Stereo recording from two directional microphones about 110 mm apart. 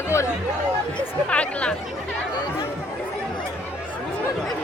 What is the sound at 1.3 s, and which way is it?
Speech, 10° left (ahead or behind).